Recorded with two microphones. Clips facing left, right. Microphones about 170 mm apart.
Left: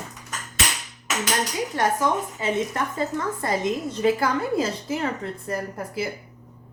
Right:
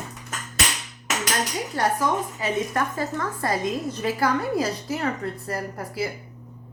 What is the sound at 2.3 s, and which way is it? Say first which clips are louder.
A woman's voice: even; 25° left (ahead or behind).